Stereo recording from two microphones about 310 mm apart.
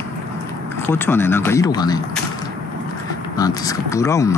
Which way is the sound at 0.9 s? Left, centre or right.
Centre.